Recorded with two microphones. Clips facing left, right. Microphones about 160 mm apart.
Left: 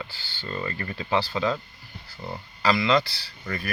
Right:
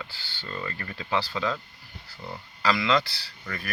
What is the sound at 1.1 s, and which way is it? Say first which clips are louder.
Speech: left 3 dB; 25° left (ahead or behind).